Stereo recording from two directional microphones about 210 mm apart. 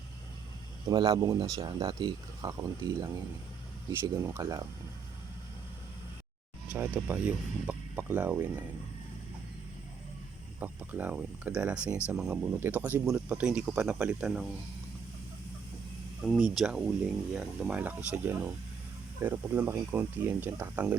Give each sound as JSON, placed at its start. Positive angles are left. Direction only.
{"t": 0.9, "sound": "speech", "side_deg": -20}
{"t": 4.1, "sound": "speech", "side_deg": -15}
{"t": 6.7, "sound": "speech", "side_deg": -10}
{"t": 10.6, "sound": "speech", "side_deg": -10}
{"t": 16.2, "sound": "speech", "side_deg": 0}